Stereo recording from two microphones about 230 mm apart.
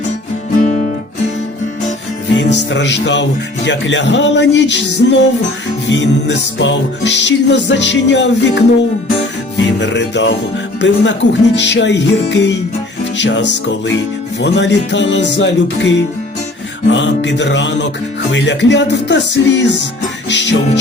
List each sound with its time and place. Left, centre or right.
2.3 s speech: left
20.3 s music: left